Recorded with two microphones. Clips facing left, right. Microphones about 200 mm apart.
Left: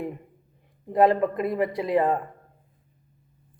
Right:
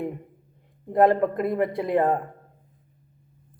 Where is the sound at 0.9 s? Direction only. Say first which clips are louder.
Right 1 dB; 55° right (ahead or behind).